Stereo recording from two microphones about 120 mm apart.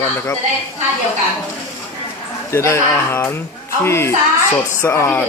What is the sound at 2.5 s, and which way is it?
Speech, 25° left (ahead or behind).